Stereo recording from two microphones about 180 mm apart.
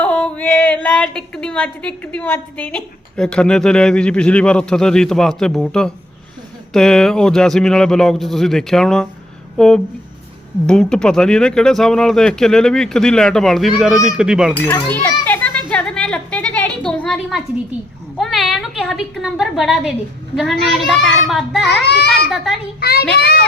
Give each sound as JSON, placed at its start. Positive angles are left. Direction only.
{"t": 0.0, "sound": "speech", "side_deg": 5}
{"t": 14.7, "sound": "children playing", "side_deg": 15}
{"t": 18.2, "sound": "speech", "side_deg": 0}
{"t": 21.7, "sound": "a child's voice", "side_deg": 65}